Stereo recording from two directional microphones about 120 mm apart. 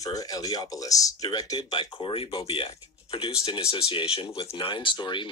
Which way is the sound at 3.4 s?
50° left (ahead or behind).